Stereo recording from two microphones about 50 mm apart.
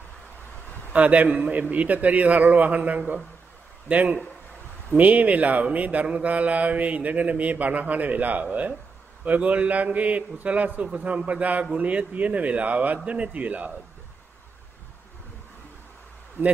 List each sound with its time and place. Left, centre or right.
0.9 s a man's voice: right